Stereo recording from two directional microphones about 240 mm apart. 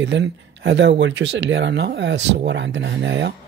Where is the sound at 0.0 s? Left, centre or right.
Right.